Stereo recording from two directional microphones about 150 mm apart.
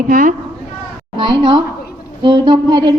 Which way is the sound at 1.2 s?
30° right (ahead or behind).